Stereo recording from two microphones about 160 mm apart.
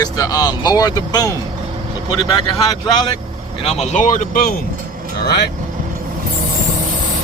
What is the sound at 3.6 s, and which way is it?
Speech, 45° left (ahead or behind).